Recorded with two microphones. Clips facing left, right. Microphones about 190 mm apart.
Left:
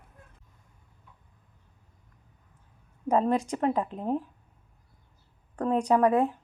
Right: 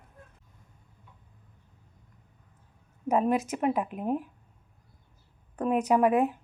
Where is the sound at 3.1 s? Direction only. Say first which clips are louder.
Left 1 dB; 10° right (ahead or behind).